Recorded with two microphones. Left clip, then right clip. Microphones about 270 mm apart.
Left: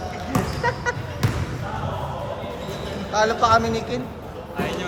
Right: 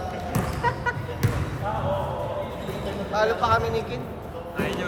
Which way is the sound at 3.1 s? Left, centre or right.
Left.